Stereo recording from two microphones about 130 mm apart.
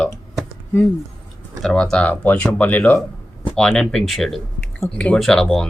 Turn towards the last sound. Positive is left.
turn(degrees=5)  # may be behind; listen again after turning